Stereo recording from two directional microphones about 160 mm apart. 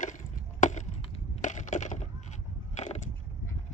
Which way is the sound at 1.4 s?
50° left (ahead or behind).